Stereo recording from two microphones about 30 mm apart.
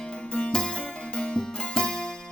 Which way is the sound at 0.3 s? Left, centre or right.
Left.